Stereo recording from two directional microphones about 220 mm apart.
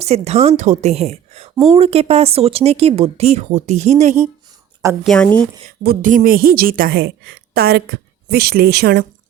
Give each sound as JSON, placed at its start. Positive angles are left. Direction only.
{"t": 0.0, "sound": "a woman's voice", "side_deg": -30}
{"t": 5.0, "sound": "speech", "side_deg": 5}
{"t": 5.8, "sound": "a woman's voice", "side_deg": -40}